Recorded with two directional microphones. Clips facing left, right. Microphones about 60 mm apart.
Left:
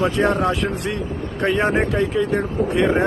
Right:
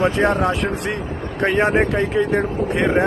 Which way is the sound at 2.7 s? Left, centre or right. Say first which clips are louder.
Even; right.